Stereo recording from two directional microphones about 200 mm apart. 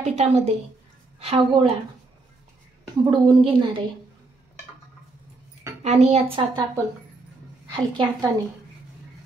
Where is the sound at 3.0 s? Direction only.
25° right (ahead or behind).